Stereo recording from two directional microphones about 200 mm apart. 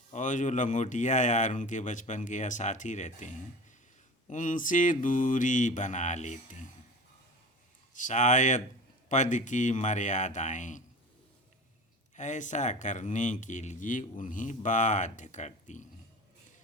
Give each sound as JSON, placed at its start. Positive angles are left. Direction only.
{"t": 0.1, "sound": "speech", "side_deg": 40}
{"t": 7.9, "sound": "speech", "side_deg": 40}
{"t": 12.1, "sound": "speech", "side_deg": 35}